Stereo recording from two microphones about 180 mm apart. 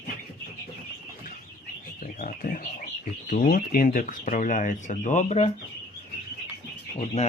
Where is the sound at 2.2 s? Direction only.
50° left (ahead or behind).